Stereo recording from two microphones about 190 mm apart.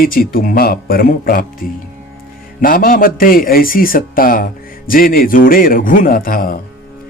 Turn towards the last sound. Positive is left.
turn(degrees=50)  # may be behind; listen again after turning